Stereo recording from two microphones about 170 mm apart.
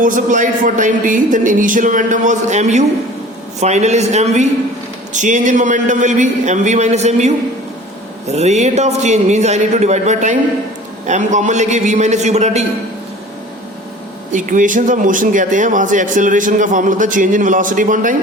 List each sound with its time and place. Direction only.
0.0 s speech: 50° right (ahead or behind)
14.3 s speech: 50° right (ahead or behind)